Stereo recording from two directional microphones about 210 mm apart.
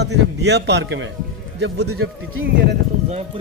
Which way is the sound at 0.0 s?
55° right (ahead or behind).